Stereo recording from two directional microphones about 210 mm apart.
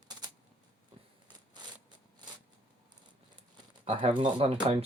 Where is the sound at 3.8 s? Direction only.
25° right (ahead or behind).